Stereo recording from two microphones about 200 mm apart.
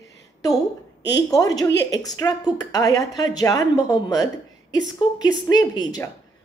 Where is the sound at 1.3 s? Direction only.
20° left (ahead or behind).